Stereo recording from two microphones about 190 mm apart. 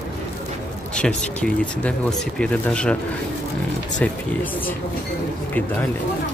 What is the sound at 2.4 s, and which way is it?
Speech, 5° left (ahead or behind).